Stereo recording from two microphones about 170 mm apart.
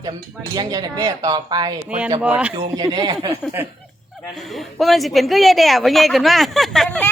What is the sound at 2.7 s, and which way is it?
Speech, 20° right (ahead or behind).